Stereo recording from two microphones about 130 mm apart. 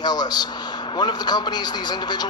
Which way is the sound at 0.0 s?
35° left (ahead or behind).